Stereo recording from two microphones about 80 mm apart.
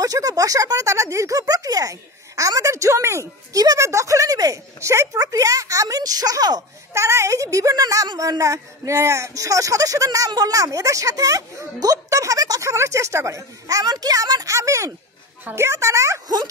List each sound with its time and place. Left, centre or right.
0.0 s speech: right
6.9 s a child's voice: right
13.8 s a child's voice: right